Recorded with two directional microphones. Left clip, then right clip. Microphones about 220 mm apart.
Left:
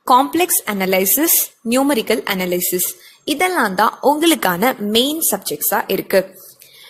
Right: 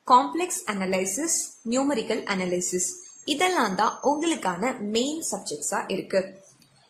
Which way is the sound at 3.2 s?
30° left (ahead or behind).